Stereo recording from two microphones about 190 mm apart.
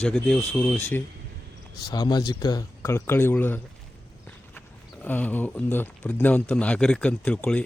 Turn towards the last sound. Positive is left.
turn(degrees=5)  # may be behind; listen again after turning